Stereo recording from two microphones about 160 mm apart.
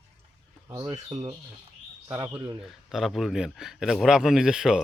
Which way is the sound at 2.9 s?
Centre (ahead or behind).